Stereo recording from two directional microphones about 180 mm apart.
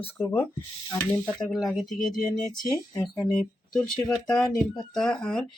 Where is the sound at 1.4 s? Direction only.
Centre (ahead or behind).